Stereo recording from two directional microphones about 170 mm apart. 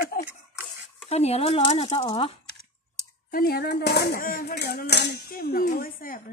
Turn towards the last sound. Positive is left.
turn(degrees=55)  # may be behind; listen again after turning